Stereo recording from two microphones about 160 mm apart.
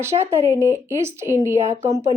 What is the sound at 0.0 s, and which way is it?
Speech, 15° right (ahead or behind).